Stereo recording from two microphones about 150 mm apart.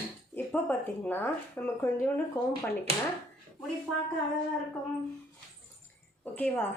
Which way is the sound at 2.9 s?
40° right (ahead or behind).